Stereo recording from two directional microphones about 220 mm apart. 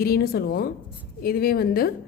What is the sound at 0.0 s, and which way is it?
A woman's voice, 45° left (ahead or behind).